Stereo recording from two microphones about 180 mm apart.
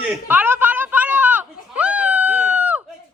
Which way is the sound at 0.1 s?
10° right (ahead or behind).